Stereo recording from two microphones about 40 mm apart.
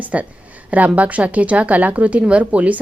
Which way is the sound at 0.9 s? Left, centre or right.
Right.